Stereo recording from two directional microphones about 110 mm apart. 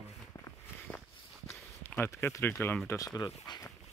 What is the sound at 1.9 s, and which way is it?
Speech, 20° left (ahead or behind).